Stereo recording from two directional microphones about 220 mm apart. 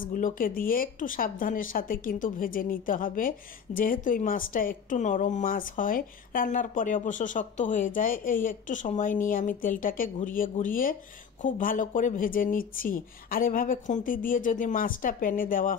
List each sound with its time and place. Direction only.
0.0 s a woman's voice: 35° left (ahead or behind)